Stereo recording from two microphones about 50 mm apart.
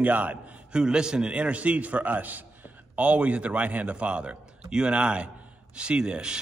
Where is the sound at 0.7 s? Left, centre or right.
Centre.